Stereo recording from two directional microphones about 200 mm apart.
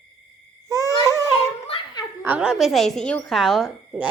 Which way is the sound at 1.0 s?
15° right (ahead or behind).